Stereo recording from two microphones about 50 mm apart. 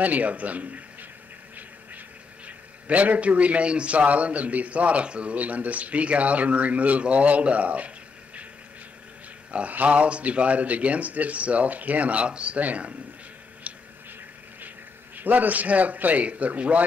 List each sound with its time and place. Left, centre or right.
0.0 s a man's voice: right
2.4 s a man's voice: right
9.5 s a man's voice: right
13.7 s a sound: right
15.1 s a man's voice: right